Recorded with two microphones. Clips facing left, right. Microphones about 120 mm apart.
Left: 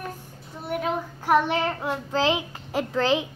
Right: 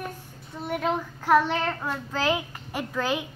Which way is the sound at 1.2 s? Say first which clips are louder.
Even; 15° left (ahead or behind).